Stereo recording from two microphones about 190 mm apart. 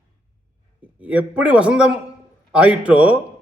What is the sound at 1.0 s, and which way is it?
A man's voice, 5° right (ahead or behind).